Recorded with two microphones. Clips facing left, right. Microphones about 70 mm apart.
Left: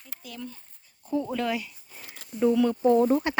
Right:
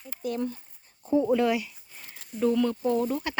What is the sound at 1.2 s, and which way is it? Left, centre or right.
Speech, centre.